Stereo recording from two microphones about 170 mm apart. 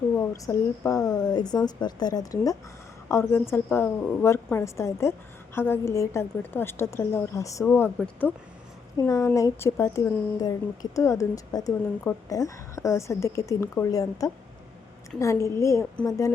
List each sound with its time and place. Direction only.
0.2 s a woman's voice: 20° left (ahead or behind)